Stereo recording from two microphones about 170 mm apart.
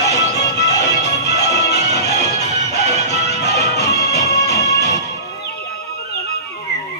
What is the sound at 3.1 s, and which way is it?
Music, 75° left (ahead or behind).